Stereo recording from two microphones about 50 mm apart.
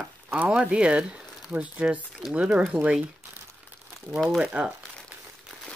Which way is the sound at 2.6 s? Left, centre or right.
Right.